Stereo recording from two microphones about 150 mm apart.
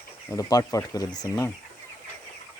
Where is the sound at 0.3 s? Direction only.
20° left (ahead or behind).